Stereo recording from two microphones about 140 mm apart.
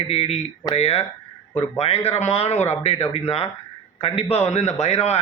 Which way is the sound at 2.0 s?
50° left (ahead or behind).